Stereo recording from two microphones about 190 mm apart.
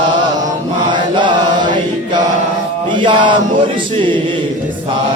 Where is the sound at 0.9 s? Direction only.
25° right (ahead or behind).